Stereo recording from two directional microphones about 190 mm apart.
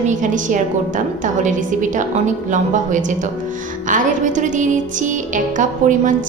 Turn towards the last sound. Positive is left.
turn(degrees=-45)  # may be behind; listen again after turning